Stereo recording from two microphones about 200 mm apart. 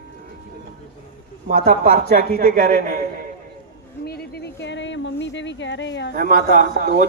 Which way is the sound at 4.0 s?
50° left (ahead or behind).